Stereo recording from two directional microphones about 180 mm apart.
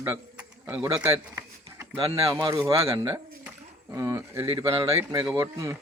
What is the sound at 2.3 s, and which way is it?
Speech, 25° right (ahead or behind).